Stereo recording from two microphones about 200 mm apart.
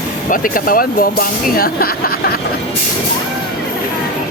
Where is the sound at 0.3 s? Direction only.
45° left (ahead or behind).